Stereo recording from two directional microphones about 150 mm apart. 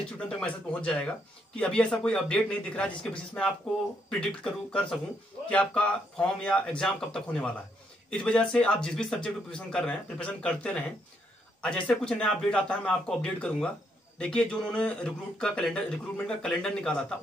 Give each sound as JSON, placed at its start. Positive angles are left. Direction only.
{"t": 0.0, "sound": "a man's voice", "side_deg": 5}